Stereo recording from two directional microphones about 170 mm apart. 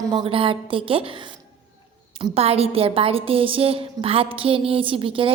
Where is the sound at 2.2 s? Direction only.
35° right (ahead or behind).